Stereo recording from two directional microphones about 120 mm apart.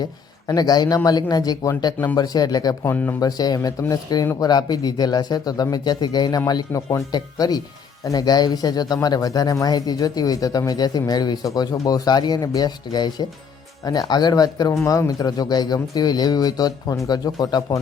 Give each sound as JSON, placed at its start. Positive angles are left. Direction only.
{"t": 0.0, "sound": "a man's voice", "side_deg": 35}
{"t": 2.8, "sound": "speech", "side_deg": 15}
{"t": 3.2, "sound": "a man's voice", "side_deg": 30}